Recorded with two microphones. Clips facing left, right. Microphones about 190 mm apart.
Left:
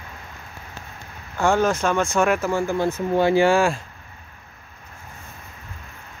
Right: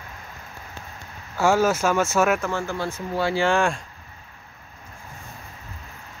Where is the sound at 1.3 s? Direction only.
5° right (ahead or behind).